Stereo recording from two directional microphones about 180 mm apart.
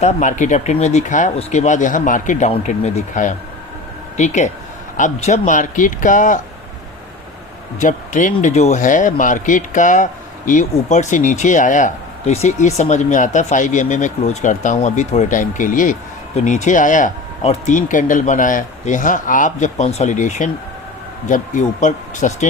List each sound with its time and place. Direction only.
0.0 s speech: 45° left (ahead or behind)
7.8 s speech: 45° left (ahead or behind)